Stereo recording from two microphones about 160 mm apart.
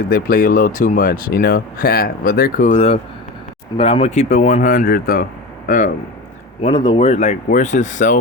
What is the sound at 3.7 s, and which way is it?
Speech, 35° left (ahead or behind).